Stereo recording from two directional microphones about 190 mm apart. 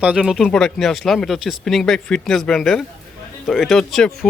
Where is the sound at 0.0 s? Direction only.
5° right (ahead or behind).